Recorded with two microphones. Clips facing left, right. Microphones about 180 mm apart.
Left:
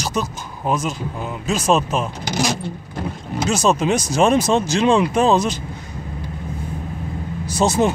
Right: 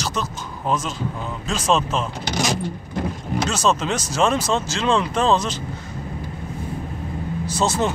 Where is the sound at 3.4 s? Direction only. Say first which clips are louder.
Left 5 dB; 10° left (ahead or behind).